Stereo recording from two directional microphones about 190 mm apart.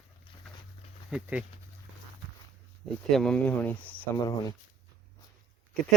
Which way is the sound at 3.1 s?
5° left (ahead or behind).